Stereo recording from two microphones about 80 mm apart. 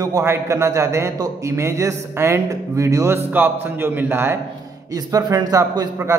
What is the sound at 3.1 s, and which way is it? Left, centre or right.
A man's voice, right.